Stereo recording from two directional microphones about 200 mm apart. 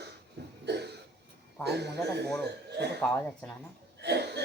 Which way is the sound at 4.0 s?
55° right (ahead or behind).